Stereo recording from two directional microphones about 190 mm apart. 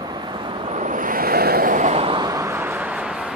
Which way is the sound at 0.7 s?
40° right (ahead or behind).